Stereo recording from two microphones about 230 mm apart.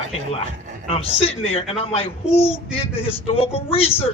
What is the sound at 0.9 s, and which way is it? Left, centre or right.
A child's voice, left.